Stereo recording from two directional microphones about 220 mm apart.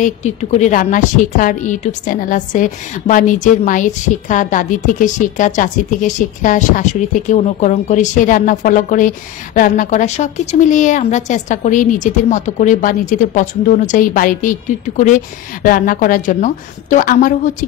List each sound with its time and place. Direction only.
0.0 s a woman's voice: 30° left (ahead or behind)